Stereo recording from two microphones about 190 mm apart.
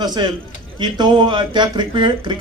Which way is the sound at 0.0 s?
20° right (ahead or behind).